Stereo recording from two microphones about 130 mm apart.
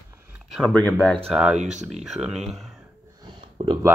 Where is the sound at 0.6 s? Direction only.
5° left (ahead or behind).